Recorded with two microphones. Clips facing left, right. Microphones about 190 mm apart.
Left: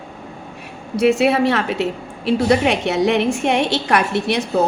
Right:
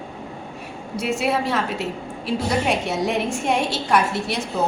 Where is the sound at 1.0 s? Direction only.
65° left (ahead or behind).